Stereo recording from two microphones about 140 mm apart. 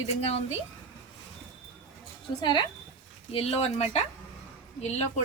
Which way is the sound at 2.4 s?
35° left (ahead or behind).